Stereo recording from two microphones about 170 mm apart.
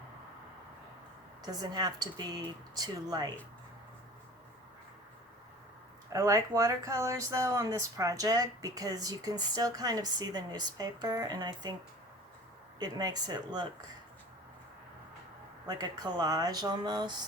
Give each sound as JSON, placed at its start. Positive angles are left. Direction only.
{"t": 1.5, "sound": "speech", "side_deg": -25}
{"t": 6.1, "sound": "speech", "side_deg": -20}
{"t": 12.8, "sound": "speech", "side_deg": -25}
{"t": 15.6, "sound": "speech", "side_deg": -25}